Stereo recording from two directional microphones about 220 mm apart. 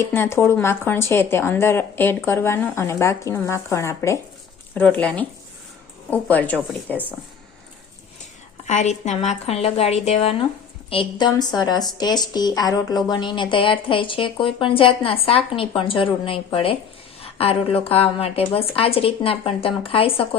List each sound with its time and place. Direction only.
0.0 s speech: 10° left (ahead or behind)
8.6 s speech: 30° left (ahead or behind)